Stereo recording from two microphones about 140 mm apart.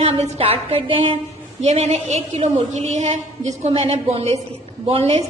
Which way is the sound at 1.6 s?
50° right (ahead or behind).